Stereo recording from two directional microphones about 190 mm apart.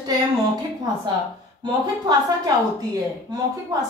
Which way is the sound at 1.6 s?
25° right (ahead or behind).